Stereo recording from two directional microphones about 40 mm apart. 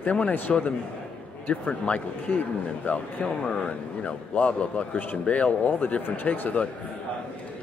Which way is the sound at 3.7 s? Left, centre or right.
Left.